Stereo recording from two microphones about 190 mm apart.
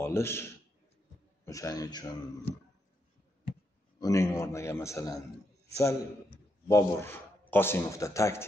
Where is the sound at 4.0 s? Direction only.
15° left (ahead or behind).